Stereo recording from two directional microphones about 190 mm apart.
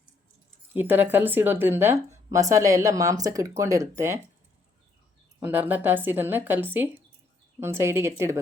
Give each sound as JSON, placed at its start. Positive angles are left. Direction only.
{"t": 0.7, "sound": "speech", "side_deg": -10}
{"t": 5.4, "sound": "speech", "side_deg": -10}